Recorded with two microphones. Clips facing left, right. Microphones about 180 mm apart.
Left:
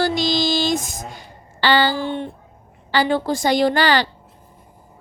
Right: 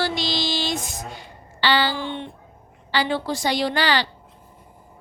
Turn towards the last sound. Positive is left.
turn(degrees=50)  # may be behind; listen again after turning